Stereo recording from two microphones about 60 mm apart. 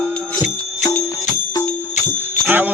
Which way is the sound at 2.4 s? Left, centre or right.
Right.